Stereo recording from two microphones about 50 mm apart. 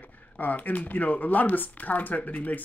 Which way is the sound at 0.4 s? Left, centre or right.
Left.